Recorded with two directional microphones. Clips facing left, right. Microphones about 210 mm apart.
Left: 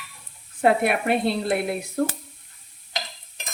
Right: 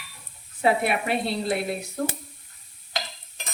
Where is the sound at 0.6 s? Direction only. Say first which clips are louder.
Left 3 dB; 55° left (ahead or behind).